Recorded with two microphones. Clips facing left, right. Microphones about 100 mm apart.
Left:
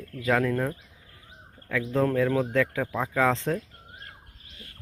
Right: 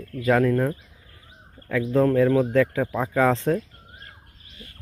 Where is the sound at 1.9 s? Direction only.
10° right (ahead or behind).